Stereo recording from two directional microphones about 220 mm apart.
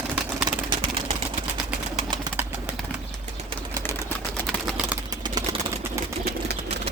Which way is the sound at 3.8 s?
10° left (ahead or behind).